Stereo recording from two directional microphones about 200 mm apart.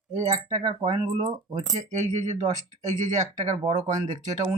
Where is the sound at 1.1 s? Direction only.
40° right (ahead or behind).